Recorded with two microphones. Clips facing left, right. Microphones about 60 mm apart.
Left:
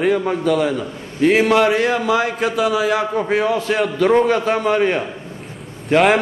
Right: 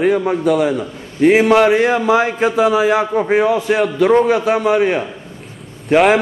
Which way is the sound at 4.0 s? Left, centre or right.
Centre.